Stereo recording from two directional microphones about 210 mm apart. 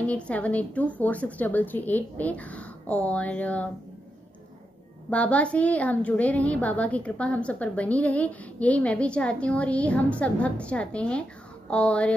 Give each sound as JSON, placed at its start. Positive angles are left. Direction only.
{"t": 0.0, "sound": "a woman's voice", "side_deg": 5}
{"t": 5.1, "sound": "a woman's voice", "side_deg": 5}